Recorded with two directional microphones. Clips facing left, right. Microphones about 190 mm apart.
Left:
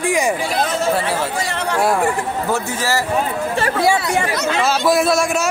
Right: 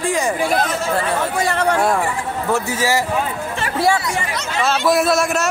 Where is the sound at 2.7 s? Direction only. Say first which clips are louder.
Right 2 dB; 15° right (ahead or behind).